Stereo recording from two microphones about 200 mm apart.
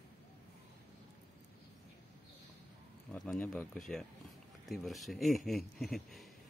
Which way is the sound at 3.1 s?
5° left (ahead or behind).